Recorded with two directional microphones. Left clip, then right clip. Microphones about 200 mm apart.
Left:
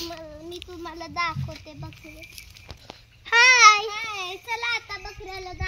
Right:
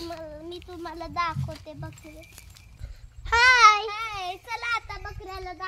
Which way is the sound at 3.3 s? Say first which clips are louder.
Left 2 dB; 15° right (ahead or behind).